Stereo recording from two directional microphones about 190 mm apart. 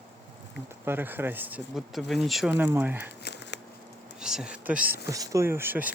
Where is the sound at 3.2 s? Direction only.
65° left (ahead or behind).